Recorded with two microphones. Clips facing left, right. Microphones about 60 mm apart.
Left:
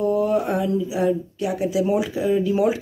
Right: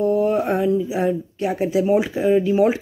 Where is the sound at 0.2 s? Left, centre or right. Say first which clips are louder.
Right 2 dB; right.